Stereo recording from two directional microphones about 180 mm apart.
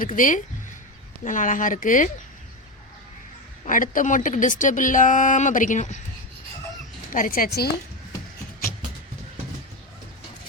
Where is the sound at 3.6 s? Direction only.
50° left (ahead or behind).